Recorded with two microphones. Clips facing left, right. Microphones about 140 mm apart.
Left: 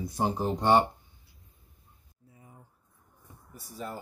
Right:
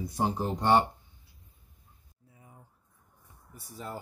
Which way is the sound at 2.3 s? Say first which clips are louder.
Left 1 dB; 5° right (ahead or behind).